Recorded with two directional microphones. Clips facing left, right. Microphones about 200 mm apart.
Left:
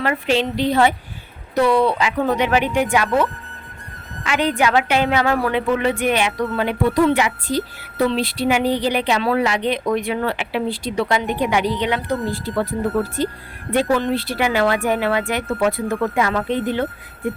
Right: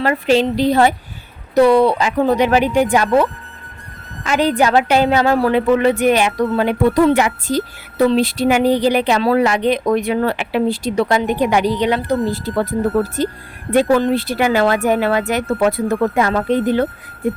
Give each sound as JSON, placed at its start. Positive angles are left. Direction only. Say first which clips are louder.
{"t": 0.0, "sound": "a woman's voice", "louder": "right 5 dB", "side_deg": -40}
{"t": 13.7, "sound": "a woman's voice", "louder": "right 5 dB", "side_deg": -45}